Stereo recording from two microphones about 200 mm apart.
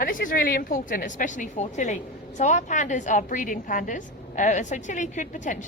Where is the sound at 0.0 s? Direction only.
45° left (ahead or behind).